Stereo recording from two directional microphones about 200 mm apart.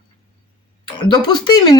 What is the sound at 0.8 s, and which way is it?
Speech, 25° left (ahead or behind).